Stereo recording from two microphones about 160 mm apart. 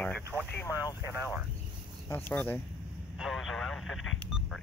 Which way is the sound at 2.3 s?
10° left (ahead or behind).